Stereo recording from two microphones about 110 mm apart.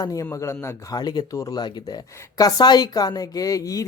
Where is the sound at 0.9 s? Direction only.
35° left (ahead or behind).